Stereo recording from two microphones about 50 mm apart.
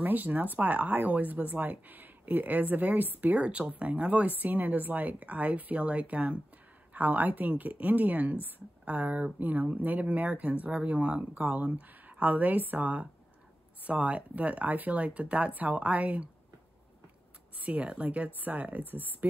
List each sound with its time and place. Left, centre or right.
0.0 s speech: right
3.4 s speech: right
17.6 s speech: right